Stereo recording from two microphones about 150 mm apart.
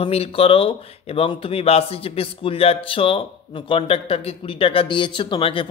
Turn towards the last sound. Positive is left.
turn(degrees=35)  # may be behind; listen again after turning